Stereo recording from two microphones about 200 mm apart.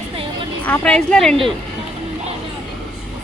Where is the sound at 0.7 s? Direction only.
5° left (ahead or behind).